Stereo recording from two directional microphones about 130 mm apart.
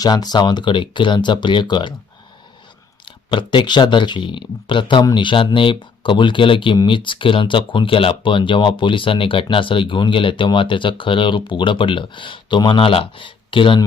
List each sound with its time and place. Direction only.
0.0 s speech: 30° left (ahead or behind)
3.2 s speech: 40° left (ahead or behind)